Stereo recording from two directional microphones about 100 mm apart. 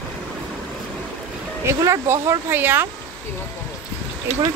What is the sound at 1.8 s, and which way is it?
Speech, 25° right (ahead or behind).